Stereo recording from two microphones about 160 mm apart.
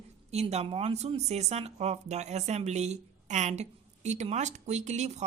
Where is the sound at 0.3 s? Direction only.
40° right (ahead or behind).